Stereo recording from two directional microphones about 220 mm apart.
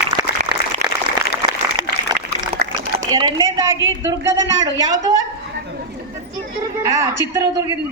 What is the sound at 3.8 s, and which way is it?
Speech, 60° right (ahead or behind).